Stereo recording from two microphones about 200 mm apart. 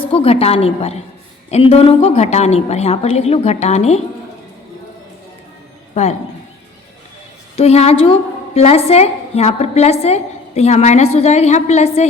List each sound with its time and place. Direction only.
0.1 s a woman's voice: 30° left (ahead or behind)
5.9 s speech: 35° left (ahead or behind)
7.5 s a woman's voice: 30° left (ahead or behind)